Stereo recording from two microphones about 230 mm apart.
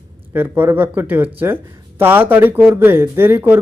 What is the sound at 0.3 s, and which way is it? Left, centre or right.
Speech, centre.